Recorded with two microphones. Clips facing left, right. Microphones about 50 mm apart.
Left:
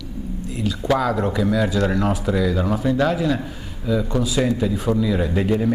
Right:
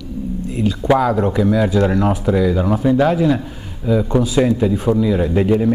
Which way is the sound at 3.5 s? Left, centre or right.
Right.